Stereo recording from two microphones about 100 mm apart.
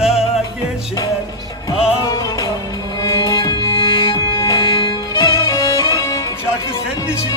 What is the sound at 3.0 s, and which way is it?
Music, 30° left (ahead or behind).